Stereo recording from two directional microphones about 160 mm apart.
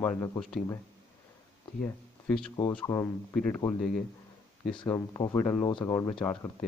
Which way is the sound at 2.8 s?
15° left (ahead or behind).